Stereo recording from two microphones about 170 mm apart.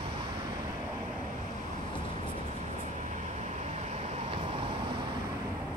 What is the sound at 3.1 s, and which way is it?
Vehicle, 45° right (ahead or behind).